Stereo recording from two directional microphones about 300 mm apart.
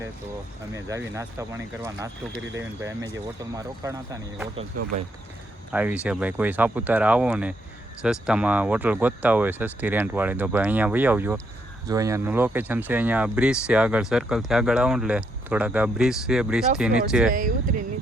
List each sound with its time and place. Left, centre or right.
0.7 s speech: centre
5.7 s speech: centre
17.3 s speech: right